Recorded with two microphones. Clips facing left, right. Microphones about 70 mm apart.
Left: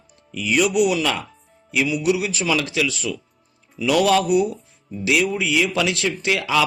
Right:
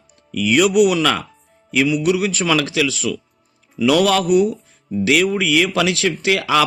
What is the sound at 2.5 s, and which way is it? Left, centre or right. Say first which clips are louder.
A man's voice: right 2 dB; right.